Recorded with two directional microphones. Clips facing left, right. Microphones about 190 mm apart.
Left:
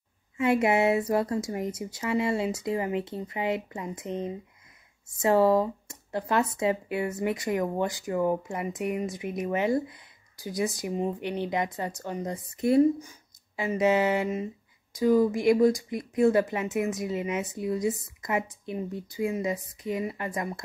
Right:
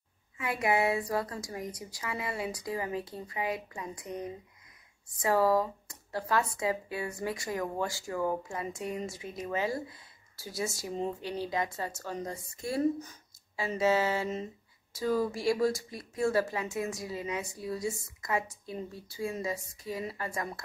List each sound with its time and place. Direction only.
0.4 s speech: 25° left (ahead or behind)